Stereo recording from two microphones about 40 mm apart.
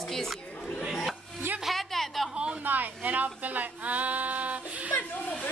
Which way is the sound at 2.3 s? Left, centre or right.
Right.